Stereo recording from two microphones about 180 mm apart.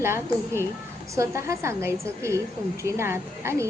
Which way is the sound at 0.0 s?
15° right (ahead or behind).